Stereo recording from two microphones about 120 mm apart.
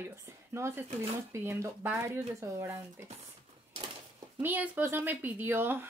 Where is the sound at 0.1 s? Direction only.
20° right (ahead or behind).